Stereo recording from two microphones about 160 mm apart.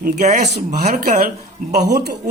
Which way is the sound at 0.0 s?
75° right (ahead or behind).